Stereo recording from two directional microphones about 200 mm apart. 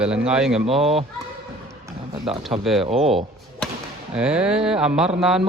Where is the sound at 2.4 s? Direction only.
Centre (ahead or behind).